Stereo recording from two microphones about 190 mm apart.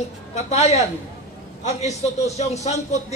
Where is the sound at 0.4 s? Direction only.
35° left (ahead or behind).